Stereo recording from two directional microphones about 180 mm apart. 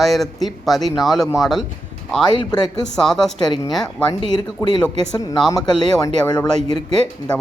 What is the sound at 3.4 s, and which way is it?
Speech, 25° left (ahead or behind).